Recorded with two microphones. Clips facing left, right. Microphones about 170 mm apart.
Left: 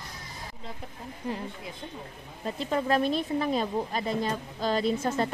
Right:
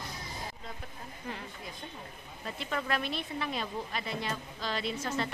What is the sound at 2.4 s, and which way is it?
Speech, 35° left (ahead or behind).